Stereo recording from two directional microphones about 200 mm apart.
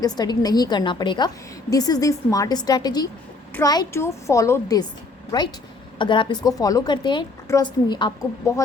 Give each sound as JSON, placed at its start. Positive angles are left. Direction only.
{"t": 0.0, "sound": "a woman's voice", "side_deg": 20}